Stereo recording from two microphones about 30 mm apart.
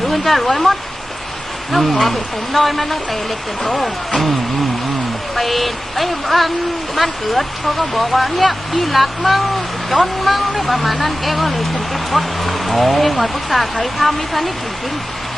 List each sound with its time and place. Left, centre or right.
0.1 s speech: centre
1.7 s speech: centre
5.4 s speech: centre